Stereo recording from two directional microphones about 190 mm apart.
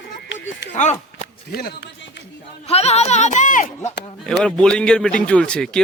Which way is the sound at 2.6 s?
35° left (ahead or behind).